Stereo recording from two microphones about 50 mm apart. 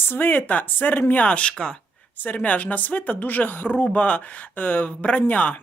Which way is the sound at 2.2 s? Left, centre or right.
Left.